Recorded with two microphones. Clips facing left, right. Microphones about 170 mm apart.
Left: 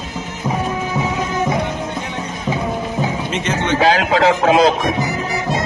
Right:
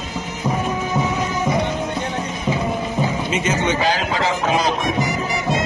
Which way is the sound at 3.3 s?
5° right (ahead or behind).